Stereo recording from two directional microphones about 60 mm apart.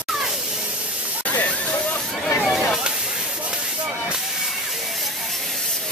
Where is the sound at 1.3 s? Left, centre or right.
Left.